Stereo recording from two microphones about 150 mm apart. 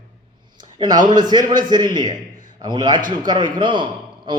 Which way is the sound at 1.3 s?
30° right (ahead or behind).